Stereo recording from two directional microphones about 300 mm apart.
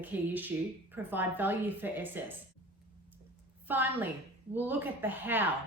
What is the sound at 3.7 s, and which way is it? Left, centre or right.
A woman's voice, centre.